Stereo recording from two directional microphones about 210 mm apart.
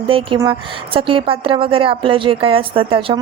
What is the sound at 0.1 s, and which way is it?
A woman's voice, 25° right (ahead or behind).